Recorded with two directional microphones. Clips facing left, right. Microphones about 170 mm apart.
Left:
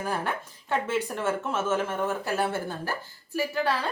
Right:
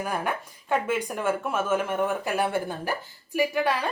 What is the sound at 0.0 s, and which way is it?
A woman's voice, 10° right (ahead or behind).